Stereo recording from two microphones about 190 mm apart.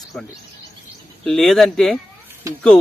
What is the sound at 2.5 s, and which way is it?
Speech, 15° right (ahead or behind).